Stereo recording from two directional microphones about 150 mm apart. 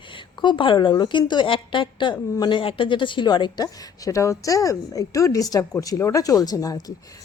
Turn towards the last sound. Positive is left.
turn(degrees=25)  # may be behind; listen again after turning